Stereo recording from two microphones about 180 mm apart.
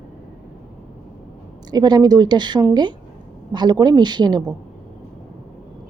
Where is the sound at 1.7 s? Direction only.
20° right (ahead or behind).